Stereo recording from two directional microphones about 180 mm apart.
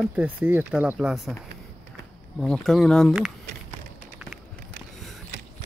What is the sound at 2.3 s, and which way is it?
Speech, 5° left (ahead or behind).